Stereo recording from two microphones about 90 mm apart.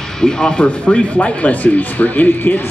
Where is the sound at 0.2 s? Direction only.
10° left (ahead or behind).